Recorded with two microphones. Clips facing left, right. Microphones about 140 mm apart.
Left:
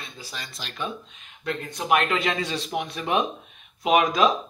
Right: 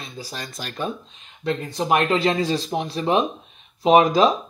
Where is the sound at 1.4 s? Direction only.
30° right (ahead or behind).